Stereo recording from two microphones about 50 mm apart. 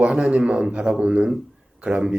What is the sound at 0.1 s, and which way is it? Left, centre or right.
A man's voice, centre.